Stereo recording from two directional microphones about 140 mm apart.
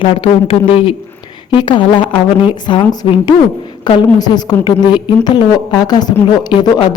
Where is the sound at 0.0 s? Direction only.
40° left (ahead or behind).